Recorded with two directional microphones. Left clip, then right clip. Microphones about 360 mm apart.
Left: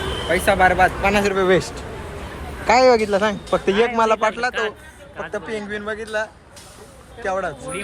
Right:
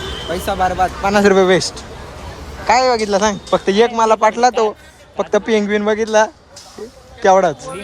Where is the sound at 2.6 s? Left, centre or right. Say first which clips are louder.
Right 1 dB; centre.